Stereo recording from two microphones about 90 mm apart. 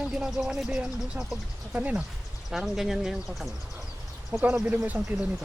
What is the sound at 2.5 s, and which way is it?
Speech, 5° right (ahead or behind).